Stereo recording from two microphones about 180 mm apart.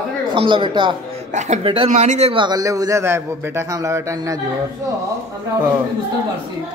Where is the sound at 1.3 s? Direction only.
40° right (ahead or behind); by 4.4 s 15° right (ahead or behind).